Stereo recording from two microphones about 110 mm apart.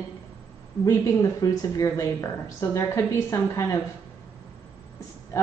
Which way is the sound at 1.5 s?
30° left (ahead or behind).